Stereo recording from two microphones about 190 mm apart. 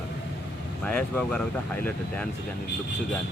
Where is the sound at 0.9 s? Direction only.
5° left (ahead or behind).